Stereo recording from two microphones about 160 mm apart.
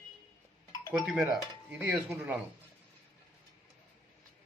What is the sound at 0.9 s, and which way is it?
Speech, 5° right (ahead or behind).